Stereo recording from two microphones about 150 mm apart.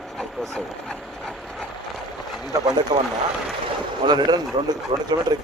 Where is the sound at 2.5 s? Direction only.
25° right (ahead or behind).